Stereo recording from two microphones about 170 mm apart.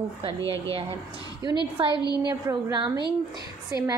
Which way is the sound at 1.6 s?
30° right (ahead or behind).